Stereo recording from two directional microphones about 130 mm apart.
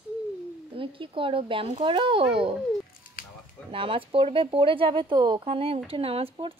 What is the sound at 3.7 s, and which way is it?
Speech, 45° right (ahead or behind).